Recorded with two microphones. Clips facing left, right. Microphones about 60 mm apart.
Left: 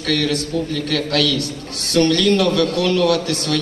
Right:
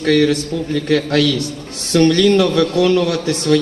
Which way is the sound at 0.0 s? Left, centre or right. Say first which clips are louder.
Right 6 dB; right.